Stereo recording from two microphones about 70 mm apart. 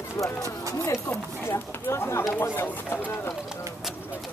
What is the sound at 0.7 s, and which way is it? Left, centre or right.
Speech, left.